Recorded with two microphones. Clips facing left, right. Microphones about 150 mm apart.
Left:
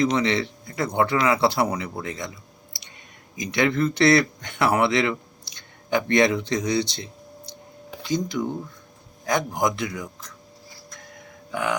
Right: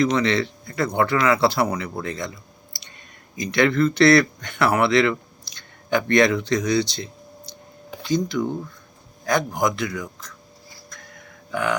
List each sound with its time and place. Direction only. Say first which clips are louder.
0.0 s speech: right 2 dB; 20° left (ahead or behind)
3.3 s speech: right 3 dB; 15° left (ahead or behind)
11.5 s speech: right 2 dB; 15° left (ahead or behind)